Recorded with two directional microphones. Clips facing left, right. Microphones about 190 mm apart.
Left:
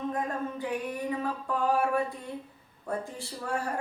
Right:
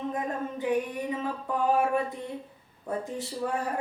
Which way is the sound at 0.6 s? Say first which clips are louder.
Right 4 dB; 20° right (ahead or behind).